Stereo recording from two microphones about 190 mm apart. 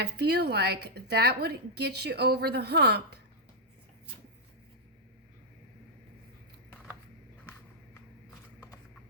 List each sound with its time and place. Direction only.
0.0 s a woman's voice: 60° right (ahead or behind)